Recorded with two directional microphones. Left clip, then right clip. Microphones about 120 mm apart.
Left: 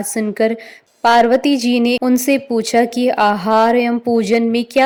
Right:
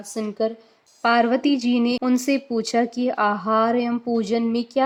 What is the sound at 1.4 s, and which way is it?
Speech, 20° left (ahead or behind).